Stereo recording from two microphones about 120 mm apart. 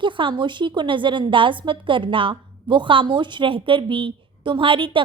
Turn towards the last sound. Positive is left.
turn(degrees=-45)  # may be behind; listen again after turning